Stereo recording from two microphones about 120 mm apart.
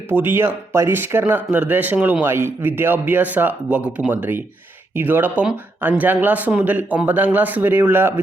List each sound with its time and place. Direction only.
0.1 s speech: 20° right (ahead or behind)